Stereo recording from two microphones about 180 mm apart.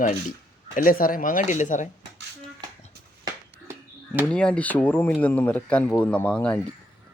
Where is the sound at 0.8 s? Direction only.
50° left (ahead or behind).